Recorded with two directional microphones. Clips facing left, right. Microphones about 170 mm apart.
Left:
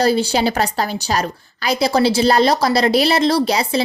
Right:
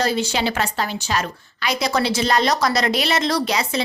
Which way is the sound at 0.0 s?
35° left (ahead or behind).